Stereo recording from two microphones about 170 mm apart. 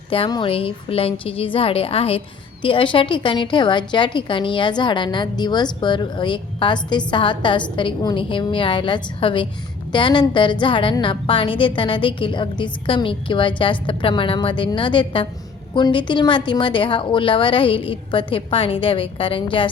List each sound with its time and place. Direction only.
0.1 s a woman's voice: 30° left (ahead or behind)